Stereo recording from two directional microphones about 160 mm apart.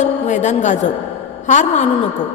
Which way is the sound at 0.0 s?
45° left (ahead or behind).